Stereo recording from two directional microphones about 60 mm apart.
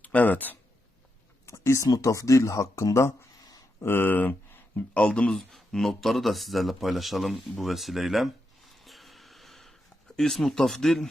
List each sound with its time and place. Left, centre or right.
0.0 s speech: left
1.5 s speech: left
3.8 s speech: left
4.9 s speech: centre